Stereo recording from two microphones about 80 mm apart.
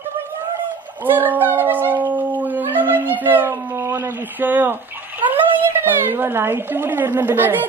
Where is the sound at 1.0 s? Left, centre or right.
Right.